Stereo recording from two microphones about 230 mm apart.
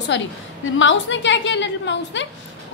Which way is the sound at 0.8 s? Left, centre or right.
Left.